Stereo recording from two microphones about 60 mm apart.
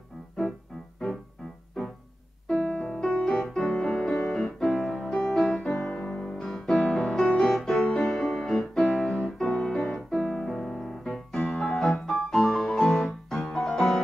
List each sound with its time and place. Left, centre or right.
1.8 s music: centre
4.9 s music: centre
5.8 s piano: centre
6.0 s music: centre
10.1 s piano: centre
11.5 s music: centre